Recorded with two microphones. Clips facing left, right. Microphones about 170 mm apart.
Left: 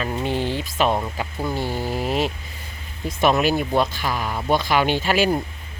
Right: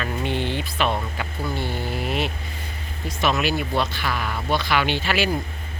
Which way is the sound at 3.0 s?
50° left (ahead or behind).